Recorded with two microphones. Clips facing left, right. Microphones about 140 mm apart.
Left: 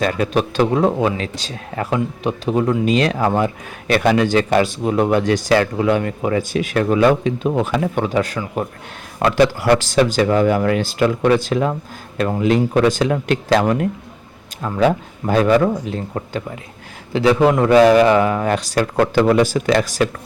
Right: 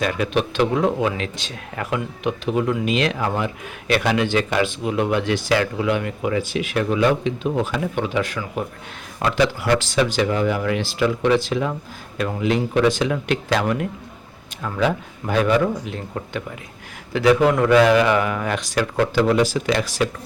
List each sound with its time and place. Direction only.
0.0 s speech: 40° left (ahead or behind); by 8.0 s 55° left (ahead or behind)
8.0 s speech: 40° left (ahead or behind)